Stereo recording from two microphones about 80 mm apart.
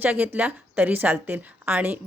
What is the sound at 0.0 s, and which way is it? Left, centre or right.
A woman's voice, right.